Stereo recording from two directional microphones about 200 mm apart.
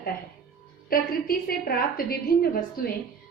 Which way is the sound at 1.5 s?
45° left (ahead or behind).